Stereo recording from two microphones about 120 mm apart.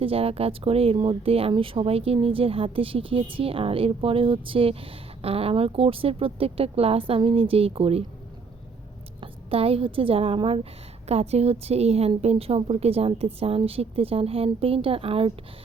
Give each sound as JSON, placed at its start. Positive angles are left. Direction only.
{"t": 0.0, "sound": "speech", "side_deg": -55}
{"t": 9.2, "sound": "speech", "side_deg": -50}